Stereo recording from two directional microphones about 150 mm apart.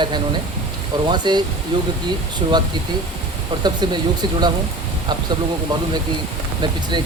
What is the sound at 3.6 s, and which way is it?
Speech, 30° right (ahead or behind).